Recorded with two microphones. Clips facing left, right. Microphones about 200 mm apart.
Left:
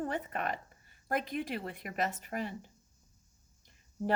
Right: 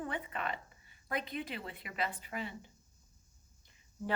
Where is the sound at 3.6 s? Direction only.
45° left (ahead or behind).